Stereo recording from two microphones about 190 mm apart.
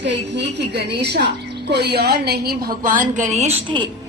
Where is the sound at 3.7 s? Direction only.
25° right (ahead or behind).